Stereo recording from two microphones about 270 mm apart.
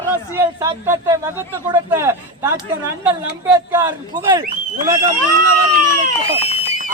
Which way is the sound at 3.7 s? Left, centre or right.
Centre.